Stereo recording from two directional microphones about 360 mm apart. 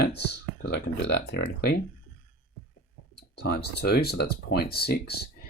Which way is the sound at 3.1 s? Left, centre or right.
Left.